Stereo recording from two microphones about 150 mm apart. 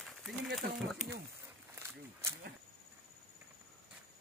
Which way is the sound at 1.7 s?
15° right (ahead or behind).